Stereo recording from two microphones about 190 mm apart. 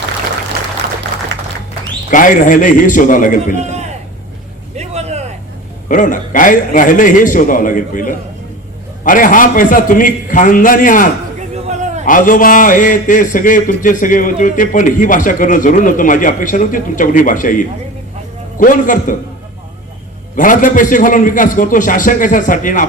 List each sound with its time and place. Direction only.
2.0 s a man's voice: 45° left (ahead or behind)
3.6 s a sound: 35° right (ahead or behind)
4.8 s vehicle: 35° right (ahead or behind)
5.9 s a man's voice: 45° left (ahead or behind)
11.7 s a sound: 40° right (ahead or behind)
12.0 s a man's voice: 45° left (ahead or behind)
20.3 s a man's voice: 45° left (ahead or behind)